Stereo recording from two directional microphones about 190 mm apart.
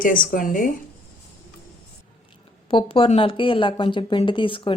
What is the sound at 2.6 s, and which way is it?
Speech, 30° left (ahead or behind).